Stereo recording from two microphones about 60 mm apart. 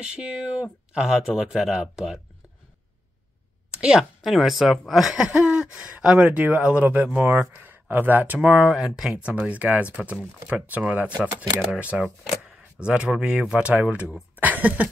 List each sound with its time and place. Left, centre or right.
0.0 s speech: centre
3.7 s a sound: centre
4.2 s speech: centre
5.2 s speech: centre
7.2 s speech: right
8.4 s speech: centre
9.1 s speech: right
14.3 s a sound: right